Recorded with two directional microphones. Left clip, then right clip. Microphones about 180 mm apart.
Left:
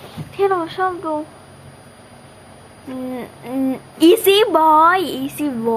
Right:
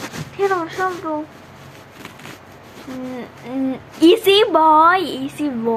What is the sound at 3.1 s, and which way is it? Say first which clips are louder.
A woman's voice: left 2 dB; 10° left (ahead or behind).